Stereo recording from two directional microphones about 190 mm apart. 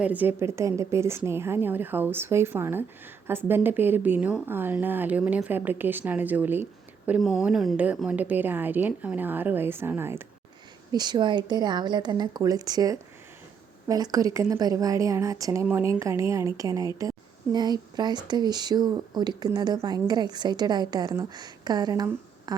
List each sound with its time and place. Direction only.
0.0 s a woman's voice: 10° right (ahead or behind)
10.9 s a woman's voice: 20° right (ahead or behind)